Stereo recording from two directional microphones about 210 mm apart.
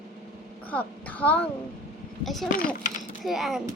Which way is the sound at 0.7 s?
5° left (ahead or behind).